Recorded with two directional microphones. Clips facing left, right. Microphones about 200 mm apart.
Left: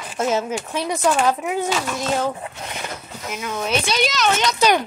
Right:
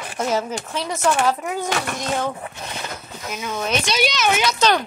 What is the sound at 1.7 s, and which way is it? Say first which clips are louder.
Speech: left 1 dB; 60° right (ahead or behind).